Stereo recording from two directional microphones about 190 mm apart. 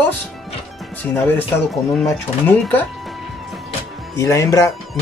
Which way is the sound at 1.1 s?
10° left (ahead or behind).